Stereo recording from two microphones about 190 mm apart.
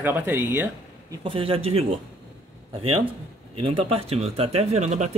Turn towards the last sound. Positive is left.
turn(degrees=-35)  # may be behind; listen again after turning